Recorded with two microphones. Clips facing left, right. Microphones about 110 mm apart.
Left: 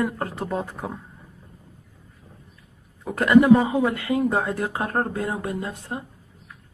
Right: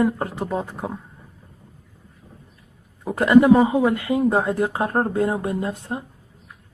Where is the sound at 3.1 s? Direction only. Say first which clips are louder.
Right 1 dB; 20° right (ahead or behind).